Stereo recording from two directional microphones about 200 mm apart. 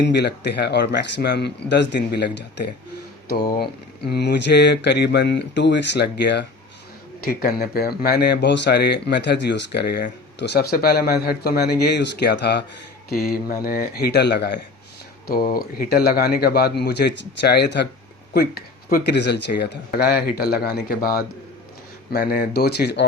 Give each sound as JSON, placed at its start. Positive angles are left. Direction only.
{"t": 0.0, "sound": "speech", "side_deg": 55}
{"t": 7.6, "sound": "speech", "side_deg": 50}